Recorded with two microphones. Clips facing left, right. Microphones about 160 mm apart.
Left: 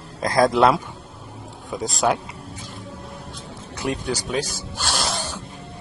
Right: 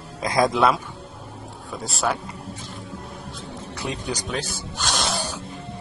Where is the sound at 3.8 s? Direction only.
15° left (ahead or behind).